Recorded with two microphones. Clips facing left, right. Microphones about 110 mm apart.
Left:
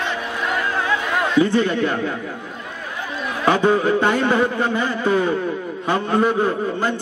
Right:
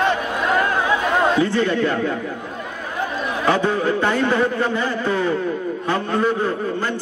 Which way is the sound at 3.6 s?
20° left (ahead or behind).